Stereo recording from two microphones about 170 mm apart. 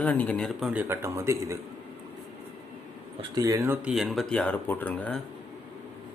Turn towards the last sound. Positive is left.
turn(degrees=10)  # may be behind; listen again after turning